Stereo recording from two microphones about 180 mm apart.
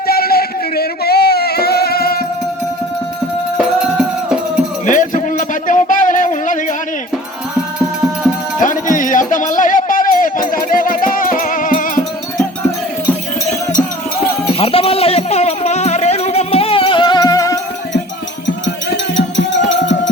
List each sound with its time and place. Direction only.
0.1 s music: 60° left (ahead or behind)
3.6 s music: 5° right (ahead or behind)
4.9 s a sound: 45° left (ahead or behind)
8.5 s music: 45° left (ahead or behind)
14.6 s a sound: 30° left (ahead or behind)
18.4 s music: 85° left